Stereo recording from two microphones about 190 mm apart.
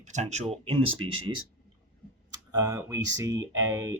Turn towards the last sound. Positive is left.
turn(degrees=-15)  # may be behind; listen again after turning